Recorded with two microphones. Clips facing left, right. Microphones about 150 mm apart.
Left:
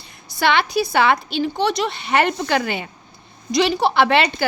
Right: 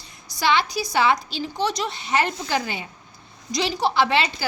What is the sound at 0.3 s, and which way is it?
A woman's voice, 60° left (ahead or behind).